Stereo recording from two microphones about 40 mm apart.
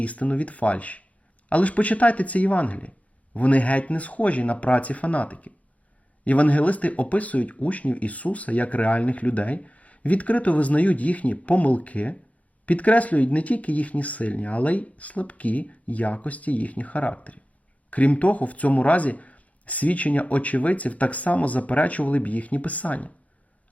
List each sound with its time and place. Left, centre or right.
0.0 s speech: left